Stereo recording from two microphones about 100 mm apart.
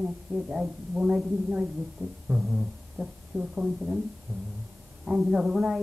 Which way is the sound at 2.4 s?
5° right (ahead or behind).